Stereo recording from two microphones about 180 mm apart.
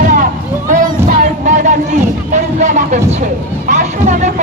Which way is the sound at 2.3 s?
40° right (ahead or behind).